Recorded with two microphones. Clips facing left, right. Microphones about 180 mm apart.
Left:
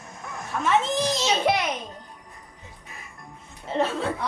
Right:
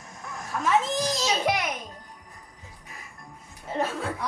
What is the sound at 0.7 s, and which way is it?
Speech, 25° left (ahead or behind).